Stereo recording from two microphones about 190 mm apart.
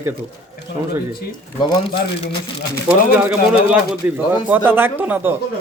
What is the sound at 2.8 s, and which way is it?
Speech, 5° right (ahead or behind).